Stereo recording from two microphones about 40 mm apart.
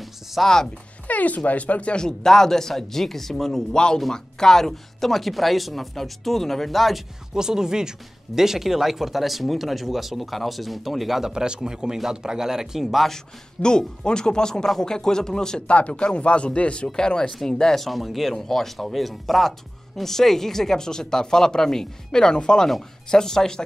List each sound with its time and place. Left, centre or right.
0.0 s music: centre
1.0 s speech: left
2.0 s speech: centre
3.7 s speech: left; by 7.0 s centre
7.3 s speech: centre
12.8 s speech: centre
13.1 s speech: centre
15.6 s speech: left
17.7 s speech: centre